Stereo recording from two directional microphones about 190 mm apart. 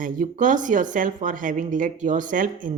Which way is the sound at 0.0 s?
45° right (ahead or behind).